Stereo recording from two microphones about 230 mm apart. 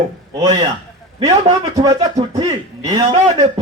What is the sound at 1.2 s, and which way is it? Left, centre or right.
A man's voice, right.